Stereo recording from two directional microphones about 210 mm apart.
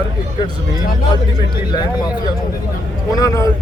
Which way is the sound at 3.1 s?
15° left (ahead or behind).